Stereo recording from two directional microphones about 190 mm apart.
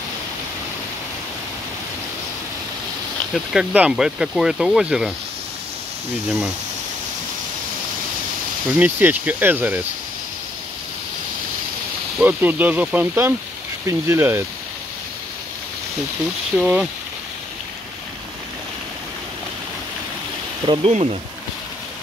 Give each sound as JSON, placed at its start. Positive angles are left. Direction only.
{"t": 3.5, "sound": "speech", "side_deg": -5}
{"t": 8.7, "sound": "speech", "side_deg": -10}
{"t": 12.2, "sound": "speech", "side_deg": -10}
{"t": 16.5, "sound": "speech", "side_deg": -5}
{"t": 20.6, "sound": "speech", "side_deg": -30}